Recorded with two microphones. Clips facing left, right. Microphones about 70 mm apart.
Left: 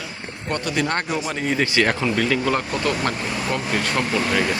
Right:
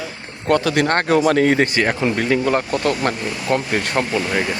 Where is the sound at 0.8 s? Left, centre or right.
Right.